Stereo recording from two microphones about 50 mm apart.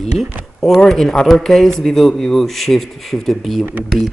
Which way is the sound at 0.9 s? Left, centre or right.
Centre.